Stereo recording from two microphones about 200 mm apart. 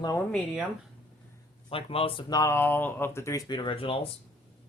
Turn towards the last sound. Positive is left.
turn(degrees=25)  # may be behind; listen again after turning